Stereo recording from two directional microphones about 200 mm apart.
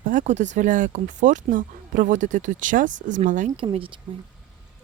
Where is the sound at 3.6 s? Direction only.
25° right (ahead or behind).